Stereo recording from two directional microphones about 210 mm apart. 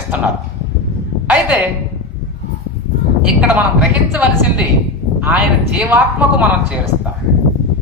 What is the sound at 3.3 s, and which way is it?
Speech, 5° right (ahead or behind).